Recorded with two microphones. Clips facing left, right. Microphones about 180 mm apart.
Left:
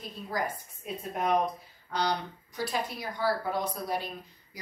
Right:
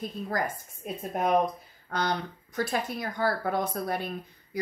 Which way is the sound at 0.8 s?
50° right (ahead or behind).